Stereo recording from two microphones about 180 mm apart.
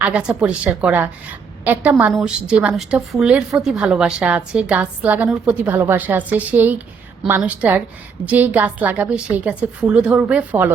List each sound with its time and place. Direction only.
0.0 s a woman's voice: 5° right (ahead or behind)